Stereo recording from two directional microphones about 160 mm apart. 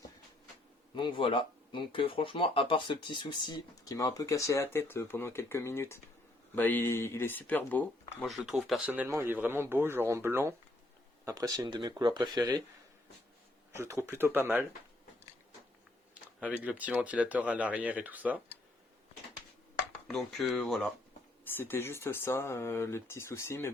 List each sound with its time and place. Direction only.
0.9 s speech: 30° left (ahead or behind); by 8.8 s centre (ahead or behind)
8.9 s speech: 15° right (ahead or behind)
13.7 s speech: 15° right (ahead or behind)
16.1 s computer keyboard: 10° right (ahead or behind)
16.6 s speech: 10° right (ahead or behind)
20.1 s speech: centre (ahead or behind)
21.4 s speech: 15° left (ahead or behind)